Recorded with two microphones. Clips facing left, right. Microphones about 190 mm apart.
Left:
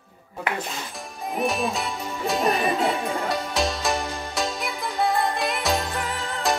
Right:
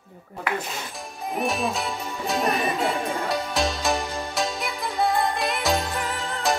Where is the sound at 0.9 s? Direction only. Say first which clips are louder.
Even; centre (ahead or behind).